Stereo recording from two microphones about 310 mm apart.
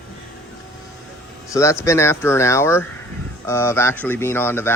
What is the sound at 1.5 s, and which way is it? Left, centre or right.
Speech, centre.